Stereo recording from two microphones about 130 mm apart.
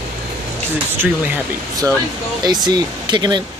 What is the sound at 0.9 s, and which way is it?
Speech, 15° right (ahead or behind).